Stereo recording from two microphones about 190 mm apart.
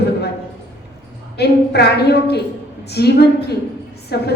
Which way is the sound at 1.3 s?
60° left (ahead or behind).